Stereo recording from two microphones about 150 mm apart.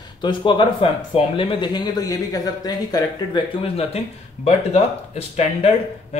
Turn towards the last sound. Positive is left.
turn(degrees=45)  # may be behind; listen again after turning